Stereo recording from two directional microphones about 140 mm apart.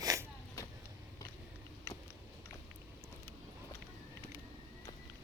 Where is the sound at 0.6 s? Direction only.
20° left (ahead or behind).